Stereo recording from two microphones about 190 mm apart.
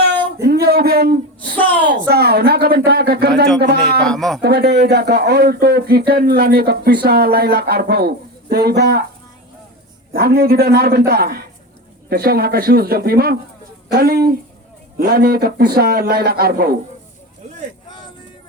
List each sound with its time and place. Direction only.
0.4 s a sound: 55° right (ahead or behind)
1.8 s speech: 60° right (ahead or behind)
4.0 s speech: centre (ahead or behind)
4.4 s speech: 60° right (ahead or behind)
10.1 s a man's voice: 55° right (ahead or behind)